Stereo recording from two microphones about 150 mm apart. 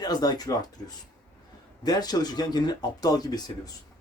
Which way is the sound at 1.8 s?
25° left (ahead or behind).